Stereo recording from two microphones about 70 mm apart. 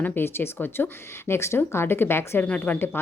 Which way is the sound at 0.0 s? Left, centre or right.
Left.